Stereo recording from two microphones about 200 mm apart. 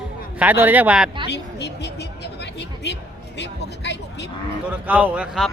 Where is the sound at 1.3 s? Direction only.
55° left (ahead or behind).